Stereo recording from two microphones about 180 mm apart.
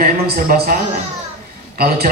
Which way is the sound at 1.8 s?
55° right (ahead or behind).